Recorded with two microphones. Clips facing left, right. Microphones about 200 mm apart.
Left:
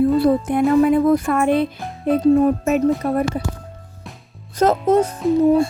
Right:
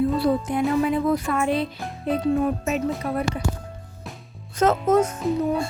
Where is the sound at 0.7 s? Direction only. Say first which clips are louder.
Left 8 dB; 50° left (ahead or behind).